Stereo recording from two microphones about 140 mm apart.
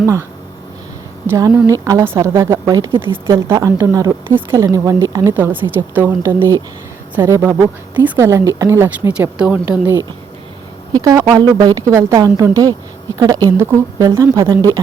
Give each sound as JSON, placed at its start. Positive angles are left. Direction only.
{"t": 0.0, "sound": "a woman's voice", "side_deg": -20}
{"t": 1.3, "sound": "a woman's voice", "side_deg": -20}
{"t": 10.9, "sound": "a woman's voice", "side_deg": -25}